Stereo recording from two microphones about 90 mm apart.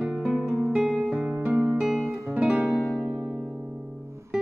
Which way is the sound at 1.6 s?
5° right (ahead or behind).